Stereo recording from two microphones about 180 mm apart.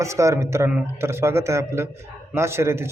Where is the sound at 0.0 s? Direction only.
15° right (ahead or behind).